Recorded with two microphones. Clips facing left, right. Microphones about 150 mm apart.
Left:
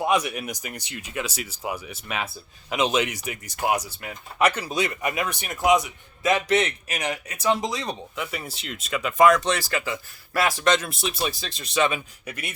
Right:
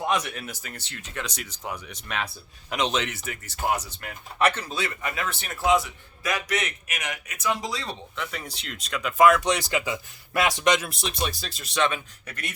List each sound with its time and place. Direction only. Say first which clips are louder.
0.0 s speech: left 4 dB; 10° left (ahead or behind)
8.1 s speech: left 2 dB; 10° left (ahead or behind)
9.5 s speech: even; 20° right (ahead or behind)
10.8 s speech: left 2 dB; centre (ahead or behind)